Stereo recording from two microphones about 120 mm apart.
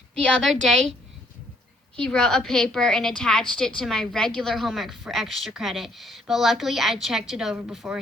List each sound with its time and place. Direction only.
0.2 s a woman's voice: 10° left (ahead or behind)
2.0 s a woman's voice: 5° left (ahead or behind)